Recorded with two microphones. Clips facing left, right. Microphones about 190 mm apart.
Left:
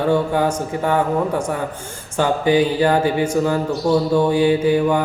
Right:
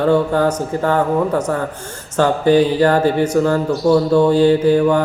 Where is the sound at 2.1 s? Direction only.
10° left (ahead or behind).